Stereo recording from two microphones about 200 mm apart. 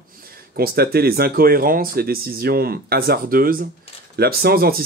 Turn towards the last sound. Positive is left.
turn(degrees=-50)  # may be behind; listen again after turning